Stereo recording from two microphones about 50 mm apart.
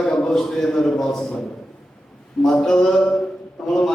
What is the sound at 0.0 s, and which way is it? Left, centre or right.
Speech, centre.